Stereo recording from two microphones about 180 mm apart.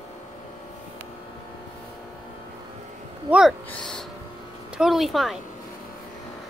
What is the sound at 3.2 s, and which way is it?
Speech, 5° right (ahead or behind).